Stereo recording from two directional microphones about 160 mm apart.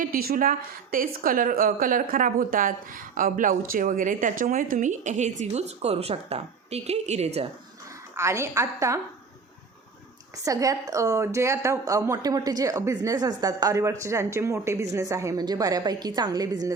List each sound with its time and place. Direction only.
0.0 s a woman's voice: 65° right (ahead or behind); by 7.4 s 40° right (ahead or behind)
8.1 s a woman's voice: 20° right (ahead or behind)
10.3 s a woman's voice: 20° right (ahead or behind)